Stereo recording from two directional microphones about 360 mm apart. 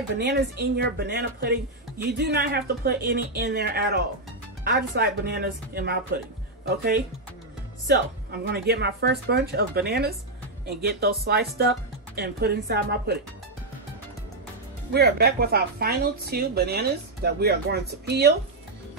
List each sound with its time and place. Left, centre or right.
0.2 s speech: right
7.8 s speech: right
14.9 s speech: right